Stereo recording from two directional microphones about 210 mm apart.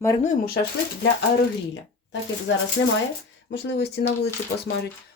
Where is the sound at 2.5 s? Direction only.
60° left (ahead or behind).